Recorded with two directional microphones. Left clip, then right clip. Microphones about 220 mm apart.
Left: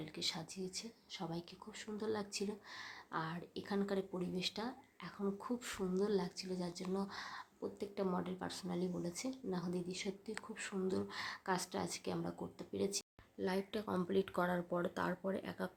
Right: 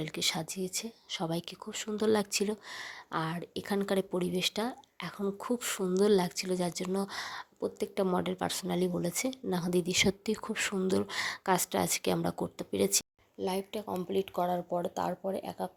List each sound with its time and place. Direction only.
0.0 s speech: 35° right (ahead or behind)
13.4 s a woman's voice: 10° right (ahead or behind)
13.8 s speech: centre (ahead or behind)